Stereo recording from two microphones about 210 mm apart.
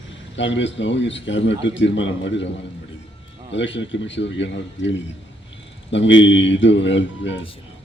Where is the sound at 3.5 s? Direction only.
60° left (ahead or behind).